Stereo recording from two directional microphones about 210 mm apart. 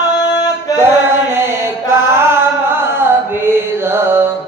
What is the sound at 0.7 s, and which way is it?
Mantra, 10° right (ahead or behind).